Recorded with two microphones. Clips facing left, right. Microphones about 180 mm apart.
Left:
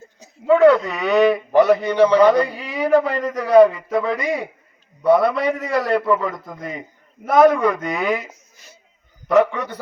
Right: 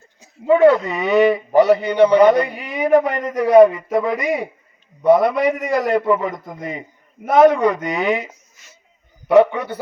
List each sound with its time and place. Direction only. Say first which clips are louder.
0.4 s a man's voice: even; 20° right (ahead or behind)
2.7 s a sound: right 2 dB; 20° right (ahead or behind)
3.2 s a man's voice: right 2 dB; 20° right (ahead or behind)
9.3 s a man's voice: right 3 dB; 30° right (ahead or behind)